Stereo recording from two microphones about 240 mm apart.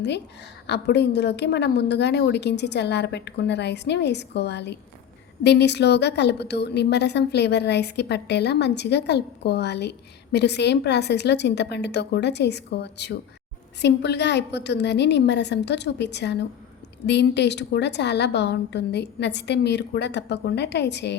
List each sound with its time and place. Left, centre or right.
0.7 s a woman's voice: left